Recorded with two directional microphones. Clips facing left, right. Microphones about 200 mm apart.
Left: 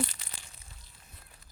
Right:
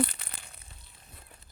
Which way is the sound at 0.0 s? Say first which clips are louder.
Right 5 dB; 60° right (ahead or behind).